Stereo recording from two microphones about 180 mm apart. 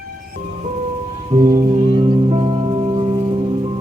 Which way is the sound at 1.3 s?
35° right (ahead or behind).